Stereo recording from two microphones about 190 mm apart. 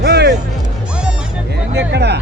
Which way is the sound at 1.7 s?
60° right (ahead or behind).